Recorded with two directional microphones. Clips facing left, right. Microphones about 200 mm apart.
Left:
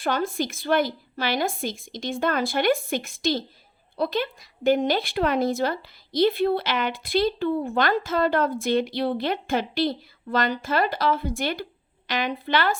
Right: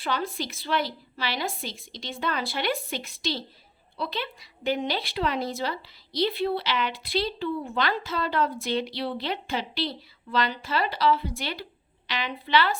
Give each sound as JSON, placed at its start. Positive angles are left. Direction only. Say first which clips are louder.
{"t": 0.0, "sound": "a woman's voice", "louder": "left 5 dB", "side_deg": 50}